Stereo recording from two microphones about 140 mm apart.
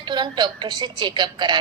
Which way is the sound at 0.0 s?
30° right (ahead or behind).